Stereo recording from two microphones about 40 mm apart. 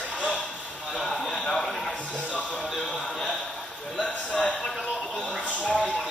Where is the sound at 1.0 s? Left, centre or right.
Centre.